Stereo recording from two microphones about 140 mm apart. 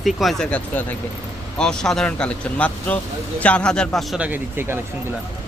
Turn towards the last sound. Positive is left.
turn(degrees=-15)  # may be behind; listen again after turning